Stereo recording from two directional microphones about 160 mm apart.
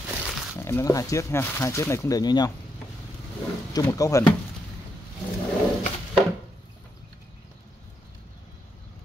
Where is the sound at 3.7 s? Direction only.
20° left (ahead or behind).